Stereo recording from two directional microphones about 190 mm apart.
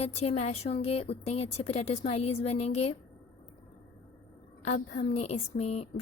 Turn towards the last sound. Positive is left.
turn(degrees=35)  # may be behind; listen again after turning